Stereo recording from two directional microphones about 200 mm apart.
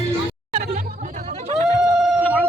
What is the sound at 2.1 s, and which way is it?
Siren, centre (ahead or behind).